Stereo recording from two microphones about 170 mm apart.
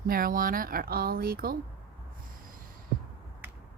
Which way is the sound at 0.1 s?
55° right (ahead or behind).